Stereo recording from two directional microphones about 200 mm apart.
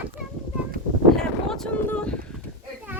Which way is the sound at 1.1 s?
Centre (ahead or behind).